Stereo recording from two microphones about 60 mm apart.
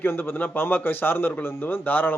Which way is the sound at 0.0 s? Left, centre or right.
Left.